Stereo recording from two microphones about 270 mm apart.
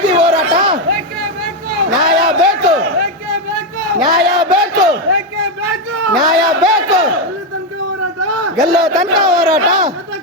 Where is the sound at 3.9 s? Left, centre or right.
Centre.